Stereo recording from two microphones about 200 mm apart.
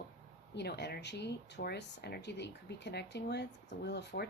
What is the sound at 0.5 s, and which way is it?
Speech, 55° left (ahead or behind).